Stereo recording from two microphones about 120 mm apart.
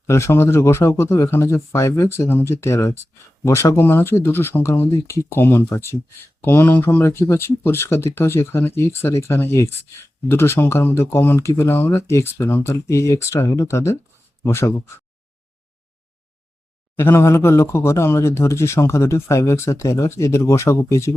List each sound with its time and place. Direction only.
0.1 s speech: 20° left (ahead or behind)
17.0 s speech: 20° left (ahead or behind)